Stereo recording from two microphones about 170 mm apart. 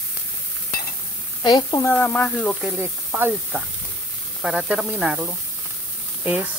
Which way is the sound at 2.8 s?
10° right (ahead or behind).